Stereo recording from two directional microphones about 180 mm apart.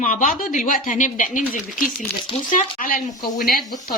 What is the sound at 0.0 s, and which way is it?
A woman's voice, 45° left (ahead or behind).